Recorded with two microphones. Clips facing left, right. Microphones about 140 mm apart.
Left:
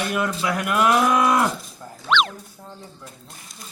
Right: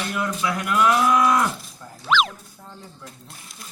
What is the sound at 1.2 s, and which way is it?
Speech, 35° left (ahead or behind).